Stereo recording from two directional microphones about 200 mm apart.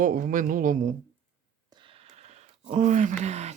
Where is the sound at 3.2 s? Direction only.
35° right (ahead or behind).